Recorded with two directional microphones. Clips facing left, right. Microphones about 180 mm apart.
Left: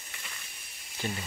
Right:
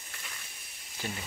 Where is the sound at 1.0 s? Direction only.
5° right (ahead or behind).